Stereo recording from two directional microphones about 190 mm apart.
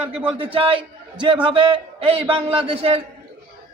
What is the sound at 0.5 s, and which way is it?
A man's voice, 25° right (ahead or behind).